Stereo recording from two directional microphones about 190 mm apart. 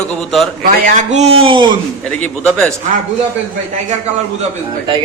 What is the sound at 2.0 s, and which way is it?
Speech, 5° left (ahead or behind).